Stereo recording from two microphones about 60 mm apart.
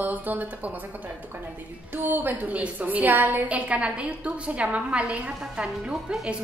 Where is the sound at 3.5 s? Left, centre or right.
Centre.